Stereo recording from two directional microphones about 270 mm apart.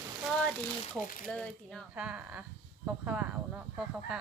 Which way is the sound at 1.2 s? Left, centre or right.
Centre.